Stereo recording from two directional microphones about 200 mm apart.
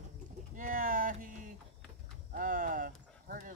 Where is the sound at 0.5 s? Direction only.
40° right (ahead or behind).